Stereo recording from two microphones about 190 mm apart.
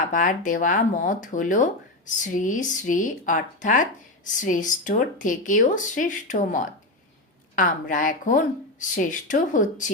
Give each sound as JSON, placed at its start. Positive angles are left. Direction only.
{"t": 0.1, "sound": "speech", "side_deg": 45}